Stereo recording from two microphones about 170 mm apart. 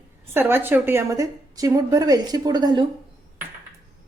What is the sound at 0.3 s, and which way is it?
A woman's voice, 10° right (ahead or behind).